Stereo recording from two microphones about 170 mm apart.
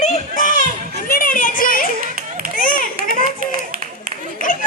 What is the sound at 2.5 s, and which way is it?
Children playing, 55° left (ahead or behind).